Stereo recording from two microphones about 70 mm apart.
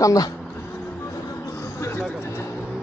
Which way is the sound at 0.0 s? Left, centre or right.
Left.